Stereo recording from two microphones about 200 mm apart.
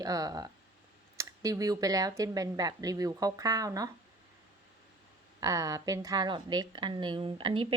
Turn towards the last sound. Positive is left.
turn(degrees=-25)  # may be behind; listen again after turning